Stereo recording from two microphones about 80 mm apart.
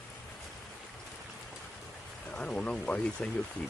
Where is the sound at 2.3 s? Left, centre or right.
Centre.